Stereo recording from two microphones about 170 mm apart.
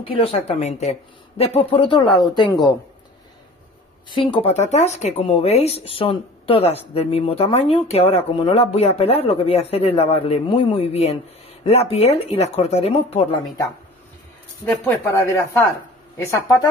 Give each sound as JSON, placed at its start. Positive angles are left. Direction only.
{"t": 0.0, "sound": "speech", "side_deg": 35}
{"t": 4.1, "sound": "speech", "side_deg": 30}
{"t": 14.6, "sound": "speech", "side_deg": 15}